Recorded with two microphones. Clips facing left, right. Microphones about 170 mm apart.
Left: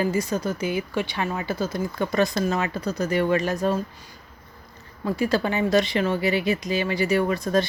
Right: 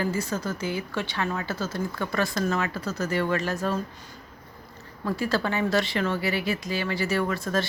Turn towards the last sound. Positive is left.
turn(degrees=15)  # may be behind; listen again after turning